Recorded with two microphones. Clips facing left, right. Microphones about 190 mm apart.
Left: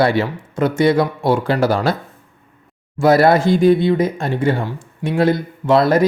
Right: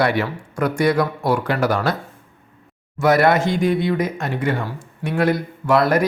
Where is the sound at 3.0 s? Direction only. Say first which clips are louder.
Left 3 dB; 30° left (ahead or behind).